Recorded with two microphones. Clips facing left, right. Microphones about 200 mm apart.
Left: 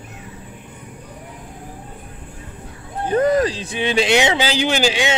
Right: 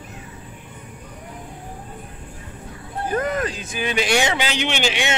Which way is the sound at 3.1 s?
35° left (ahead or behind).